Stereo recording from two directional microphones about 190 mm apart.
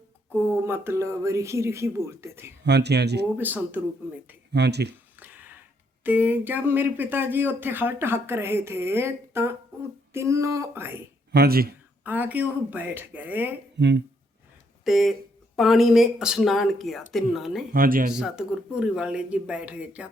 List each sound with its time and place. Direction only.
0.3 s speech: 10° right (ahead or behind)
2.6 s speech: 60° right (ahead or behind)
3.3 s speech: 10° right (ahead or behind)
4.5 s speech: 60° right (ahead or behind)
5.2 s speech: 10° right (ahead or behind)
11.3 s speech: 55° right (ahead or behind)
12.0 s speech: 10° right (ahead or behind)
13.7 s speech: 65° right (ahead or behind)
14.8 s speech: centre (ahead or behind)
17.7 s speech: 50° right (ahead or behind)
18.1 s speech: 5° right (ahead or behind)